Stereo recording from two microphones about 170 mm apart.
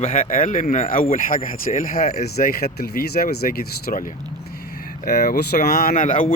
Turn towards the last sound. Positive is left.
turn(degrees=50)  # may be behind; listen again after turning